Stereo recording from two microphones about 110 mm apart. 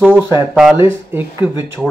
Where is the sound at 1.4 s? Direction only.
10° right (ahead or behind).